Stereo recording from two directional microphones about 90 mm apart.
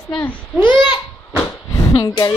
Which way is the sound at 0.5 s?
20° right (ahead or behind).